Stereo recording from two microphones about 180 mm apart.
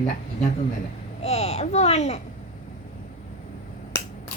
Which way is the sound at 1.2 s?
35° left (ahead or behind).